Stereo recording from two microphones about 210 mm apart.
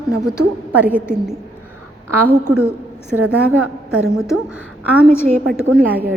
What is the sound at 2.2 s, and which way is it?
Speech, 90° right.